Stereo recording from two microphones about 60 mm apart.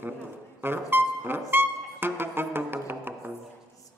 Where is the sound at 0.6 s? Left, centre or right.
Right.